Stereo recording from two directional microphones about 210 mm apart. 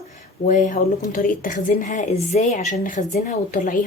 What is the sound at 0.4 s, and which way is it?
A woman's voice, 40° left (ahead or behind).